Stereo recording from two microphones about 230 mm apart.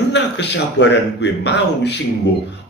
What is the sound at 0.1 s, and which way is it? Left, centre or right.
A man's voice, left.